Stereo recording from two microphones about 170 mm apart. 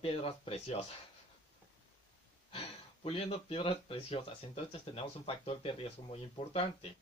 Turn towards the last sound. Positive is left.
turn(degrees=35)  # may be behind; listen again after turning